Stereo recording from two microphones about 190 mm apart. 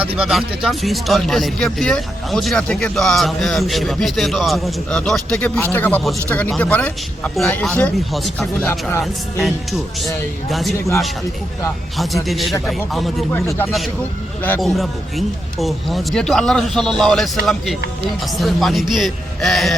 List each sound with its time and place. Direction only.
0.2 s speech: centre (ahead or behind)
11.9 s speech: centre (ahead or behind)
13.3 s speech: 10° left (ahead or behind)